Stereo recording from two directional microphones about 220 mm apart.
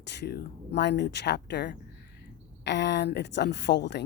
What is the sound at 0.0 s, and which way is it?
A woman's voice, 50° left (ahead or behind).